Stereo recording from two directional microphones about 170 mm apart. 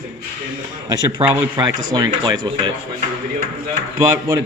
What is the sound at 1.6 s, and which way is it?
Speech, 25° right (ahead or behind).